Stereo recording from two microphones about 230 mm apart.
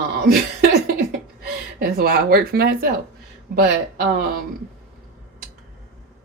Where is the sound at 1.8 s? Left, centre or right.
Right.